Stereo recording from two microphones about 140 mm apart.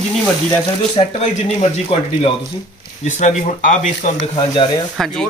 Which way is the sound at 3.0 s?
60° left (ahead or behind).